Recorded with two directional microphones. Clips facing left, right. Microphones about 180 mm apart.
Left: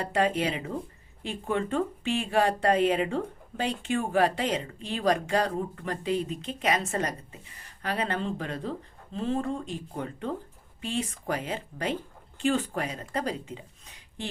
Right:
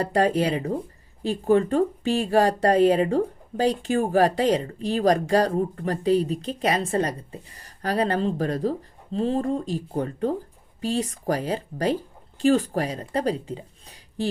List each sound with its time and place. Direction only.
0.0 s speech: 40° right (ahead or behind)